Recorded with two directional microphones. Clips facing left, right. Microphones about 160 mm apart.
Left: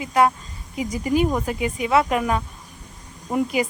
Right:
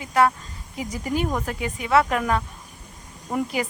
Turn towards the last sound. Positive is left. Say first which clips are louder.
# left 4 dB
turn(degrees=15)  # may be behind; listen again after turning